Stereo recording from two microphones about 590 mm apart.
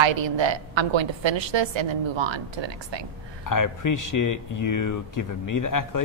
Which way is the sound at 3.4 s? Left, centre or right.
Left.